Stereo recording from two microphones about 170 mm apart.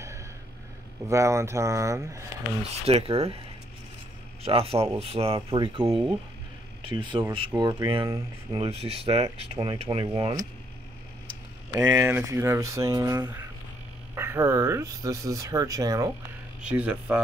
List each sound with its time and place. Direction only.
1.0 s speech: 15° right (ahead or behind)
2.7 s speech: 35° right (ahead or behind)
4.4 s a man's voice: 35° right (ahead or behind)
11.7 s speech: 15° right (ahead or behind)
16.6 s speech: 10° right (ahead or behind)